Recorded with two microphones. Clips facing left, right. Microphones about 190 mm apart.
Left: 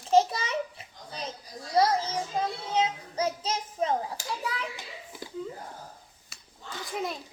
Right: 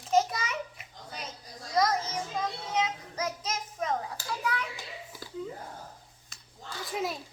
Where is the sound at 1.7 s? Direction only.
30° left (ahead or behind).